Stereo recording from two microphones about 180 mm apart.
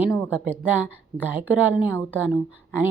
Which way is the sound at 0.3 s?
10° right (ahead or behind).